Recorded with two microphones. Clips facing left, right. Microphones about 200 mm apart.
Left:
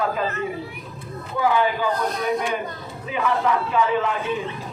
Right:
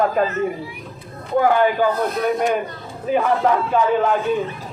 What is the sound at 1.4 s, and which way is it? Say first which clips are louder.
Speech: right 4 dB; 50° right (ahead or behind).